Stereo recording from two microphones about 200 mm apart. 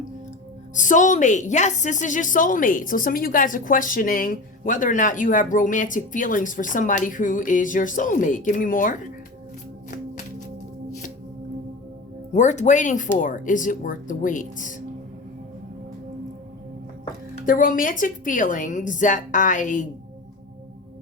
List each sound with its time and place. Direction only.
0.7 s a woman's voice: 40° left (ahead or behind)
12.3 s a woman's voice: 35° left (ahead or behind)
17.4 s a woman's voice: 45° left (ahead or behind)